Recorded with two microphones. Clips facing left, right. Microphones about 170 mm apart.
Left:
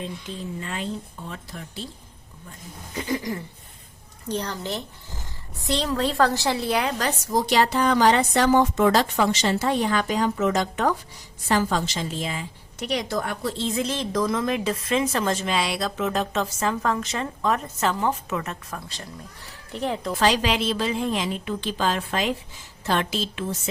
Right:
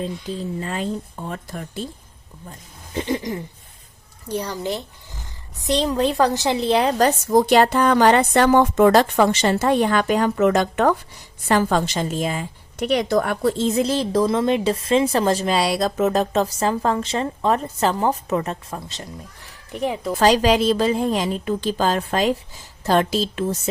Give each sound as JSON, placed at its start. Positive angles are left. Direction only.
{"t": 0.6, "sound": "a woman's voice", "side_deg": -40}
{"t": 2.5, "sound": "a woman's voice", "side_deg": -25}
{"t": 4.3, "sound": "a woman's voice", "side_deg": -10}
{"t": 7.0, "sound": "a woman's voice", "side_deg": -55}
{"t": 19.7, "sound": "a woman's voice", "side_deg": -10}
{"t": 20.1, "sound": "a woman's voice", "side_deg": -40}